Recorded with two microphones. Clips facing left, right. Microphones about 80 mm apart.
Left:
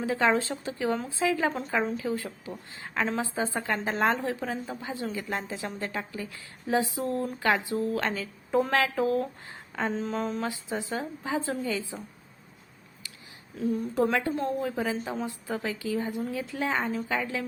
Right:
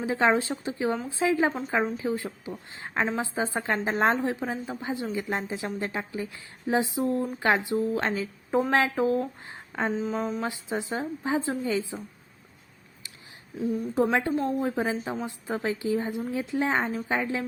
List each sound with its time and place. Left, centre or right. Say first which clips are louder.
0.0 s a woman's voice: right 1 dB; right
9.9 s mantra: right 2 dB; centre
10.4 s a woman's voice: right 1 dB; right
13.9 s a woman's voice: right 3 dB; right